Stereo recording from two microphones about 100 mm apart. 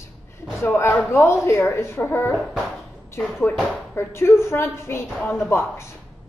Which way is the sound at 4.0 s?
25° left (ahead or behind).